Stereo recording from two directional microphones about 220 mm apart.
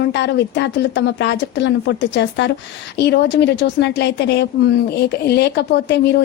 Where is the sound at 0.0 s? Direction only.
50° left (ahead or behind).